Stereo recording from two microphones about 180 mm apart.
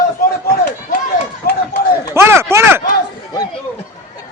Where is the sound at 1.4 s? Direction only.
60° left (ahead or behind).